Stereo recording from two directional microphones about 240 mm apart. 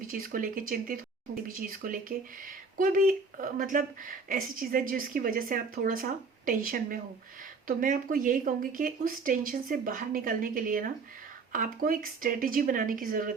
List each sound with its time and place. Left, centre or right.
0.1 s speech: right